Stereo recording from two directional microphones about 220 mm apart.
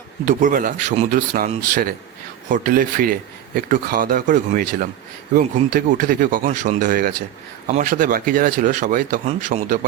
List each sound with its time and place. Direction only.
0.3 s a man's voice: 35° right (ahead or behind)